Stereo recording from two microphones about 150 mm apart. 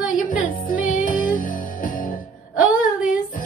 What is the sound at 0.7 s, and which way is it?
Music, 65° left (ahead or behind).